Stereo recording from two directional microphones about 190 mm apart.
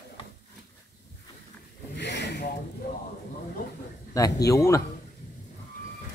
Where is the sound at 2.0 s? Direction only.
65° left (ahead or behind).